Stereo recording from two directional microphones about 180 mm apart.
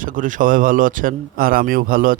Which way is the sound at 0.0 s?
50° right (ahead or behind).